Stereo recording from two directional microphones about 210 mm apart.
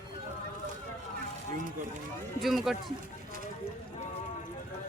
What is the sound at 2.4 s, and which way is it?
Speech, centre (ahead or behind).